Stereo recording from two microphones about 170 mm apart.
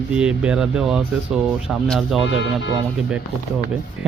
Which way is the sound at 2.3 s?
90° left.